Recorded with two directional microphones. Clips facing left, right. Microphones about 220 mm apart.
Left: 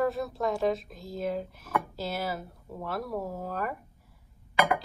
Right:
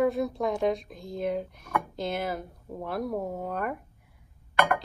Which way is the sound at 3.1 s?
20° right (ahead or behind).